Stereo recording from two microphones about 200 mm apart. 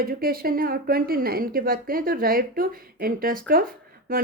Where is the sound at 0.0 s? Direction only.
50° right (ahead or behind).